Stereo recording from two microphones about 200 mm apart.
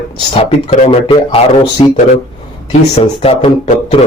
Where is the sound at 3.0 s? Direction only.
30° left (ahead or behind).